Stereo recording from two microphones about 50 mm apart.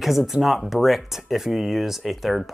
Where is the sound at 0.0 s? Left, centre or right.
Centre.